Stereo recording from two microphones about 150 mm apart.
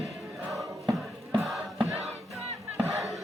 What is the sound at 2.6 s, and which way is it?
Battle cry, centre (ahead or behind).